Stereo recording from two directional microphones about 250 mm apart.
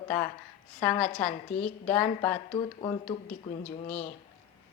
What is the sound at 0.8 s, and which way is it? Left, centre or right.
Speech, centre.